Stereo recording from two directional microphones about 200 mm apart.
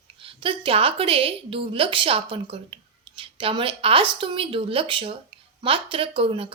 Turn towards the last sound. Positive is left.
turn(degrees=-25)  # may be behind; listen again after turning